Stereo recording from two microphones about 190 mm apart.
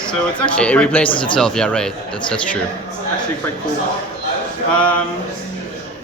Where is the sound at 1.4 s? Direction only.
5° left (ahead or behind).